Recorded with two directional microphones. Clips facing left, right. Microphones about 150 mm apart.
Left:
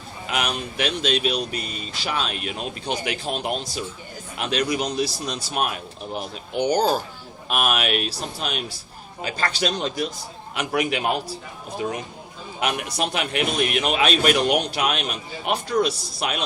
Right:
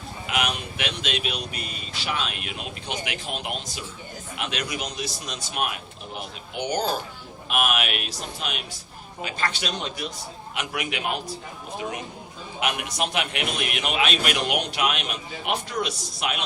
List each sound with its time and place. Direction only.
0.3 s a sound: 35° left (ahead or behind)
2.0 s a man's voice: 35° left (ahead or behind)
12.5 s a man's voice: 35° left (ahead or behind)